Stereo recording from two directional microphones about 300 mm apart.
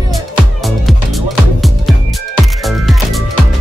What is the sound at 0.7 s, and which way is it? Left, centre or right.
Music, centre.